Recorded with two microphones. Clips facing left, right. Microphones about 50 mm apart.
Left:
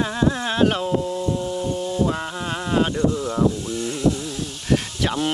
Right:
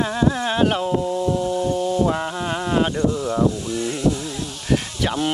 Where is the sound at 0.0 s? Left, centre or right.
Centre.